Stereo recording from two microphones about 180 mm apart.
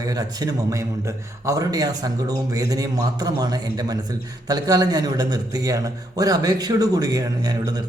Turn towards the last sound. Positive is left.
turn(degrees=-20)  # may be behind; listen again after turning